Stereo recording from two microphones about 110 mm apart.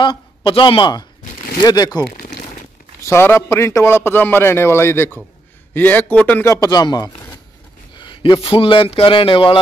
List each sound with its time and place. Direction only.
0.0 s a man's voice: 45° left (ahead or behind)
3.1 s a man's voice: 20° left (ahead or behind)
6.5 s a man's voice: 35° left (ahead or behind)
8.0 s a sound: 50° left (ahead or behind)
8.4 s speech: 55° left (ahead or behind)